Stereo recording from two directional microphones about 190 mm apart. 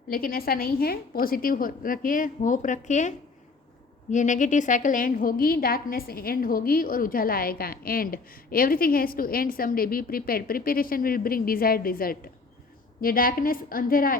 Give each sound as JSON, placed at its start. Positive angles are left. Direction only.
{"t": 0.1, "sound": "a woman's voice", "side_deg": 50}